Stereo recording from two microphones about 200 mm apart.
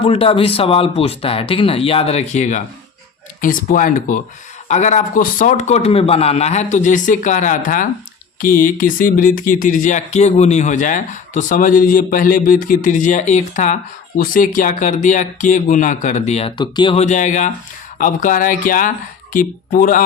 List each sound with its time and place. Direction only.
0.0 s speech: 30° left (ahead or behind)